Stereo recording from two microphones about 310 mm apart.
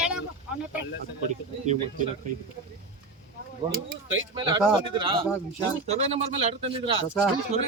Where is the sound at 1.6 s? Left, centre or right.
Right.